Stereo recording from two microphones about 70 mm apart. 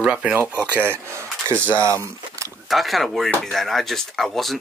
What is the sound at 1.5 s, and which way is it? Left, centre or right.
Speech, left.